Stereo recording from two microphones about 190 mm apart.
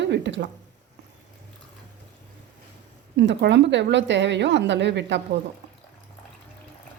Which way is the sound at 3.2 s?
65° right (ahead or behind).